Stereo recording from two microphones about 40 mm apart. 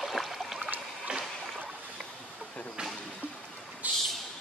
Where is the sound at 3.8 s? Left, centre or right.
Right.